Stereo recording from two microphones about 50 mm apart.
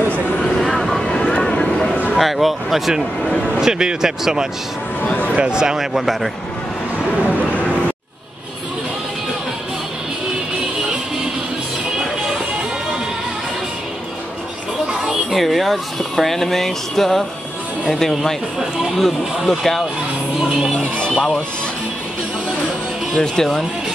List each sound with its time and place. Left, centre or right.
0.6 s vehicle: centre
1.5 s a sound: centre
2.1 s speech: centre
5.0 s speech: left
5.3 s speech: centre
7.2 s a sound: right
14.9 s children playing: centre
15.3 s speech: centre
18.9 s speech: centre
23.2 s speech: centre